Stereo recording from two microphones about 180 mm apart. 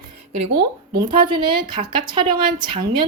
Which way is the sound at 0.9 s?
25° right (ahead or behind).